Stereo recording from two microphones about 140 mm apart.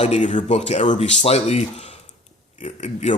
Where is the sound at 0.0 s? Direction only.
55° left (ahead or behind).